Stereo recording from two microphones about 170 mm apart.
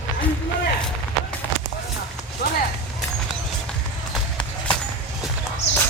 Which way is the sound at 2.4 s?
65° left (ahead or behind).